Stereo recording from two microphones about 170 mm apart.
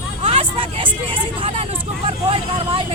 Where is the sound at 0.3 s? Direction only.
40° right (ahead or behind).